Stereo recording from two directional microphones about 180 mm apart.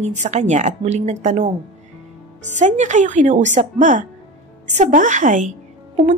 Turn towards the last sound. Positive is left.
turn(degrees=-45)  # may be behind; listen again after turning